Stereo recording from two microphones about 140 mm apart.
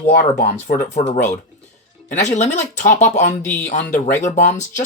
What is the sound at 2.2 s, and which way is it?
Speech, 55° left (ahead or behind).